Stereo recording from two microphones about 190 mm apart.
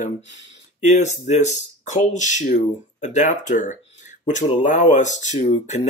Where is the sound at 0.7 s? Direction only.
40° left (ahead or behind).